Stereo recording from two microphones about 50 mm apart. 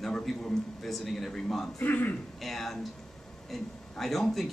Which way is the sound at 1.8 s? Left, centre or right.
Left.